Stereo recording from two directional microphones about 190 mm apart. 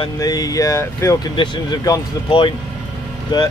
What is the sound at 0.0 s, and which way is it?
Speech, 20° left (ahead or behind).